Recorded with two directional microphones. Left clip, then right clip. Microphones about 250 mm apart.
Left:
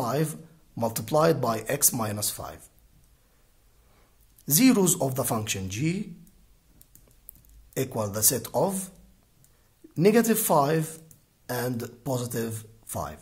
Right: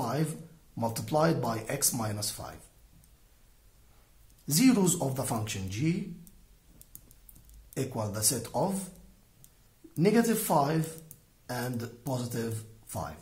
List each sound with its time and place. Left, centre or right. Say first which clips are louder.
0.0 s speech: left 5 dB; left
4.5 s speech: left 4 dB; left
7.7 s speech: left 5 dB; left
9.9 s speech: left 5 dB; left